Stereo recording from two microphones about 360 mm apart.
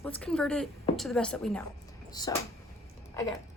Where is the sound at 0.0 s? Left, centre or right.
Centre.